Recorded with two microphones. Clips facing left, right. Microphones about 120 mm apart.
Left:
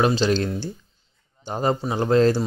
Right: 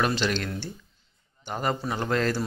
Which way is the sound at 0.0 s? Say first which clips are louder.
Left 6 dB; 35° left (ahead or behind).